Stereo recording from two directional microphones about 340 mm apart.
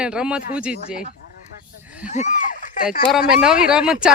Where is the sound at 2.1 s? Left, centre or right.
Left.